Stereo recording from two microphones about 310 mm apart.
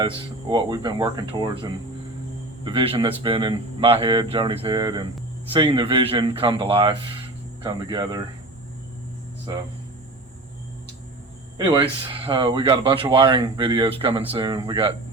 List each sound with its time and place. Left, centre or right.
0.0 s speech: centre
11.5 s speech: centre